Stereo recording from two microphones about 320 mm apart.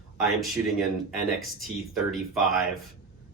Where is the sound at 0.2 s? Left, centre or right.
Centre.